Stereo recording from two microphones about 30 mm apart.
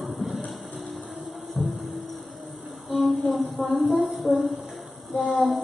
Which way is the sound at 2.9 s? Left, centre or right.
Centre.